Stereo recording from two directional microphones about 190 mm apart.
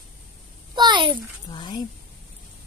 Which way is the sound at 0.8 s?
25° right (ahead or behind).